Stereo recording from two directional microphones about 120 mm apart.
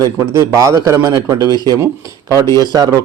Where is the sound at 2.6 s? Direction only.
30° right (ahead or behind).